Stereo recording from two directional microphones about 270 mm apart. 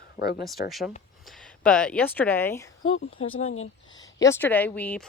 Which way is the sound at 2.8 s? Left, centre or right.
Left.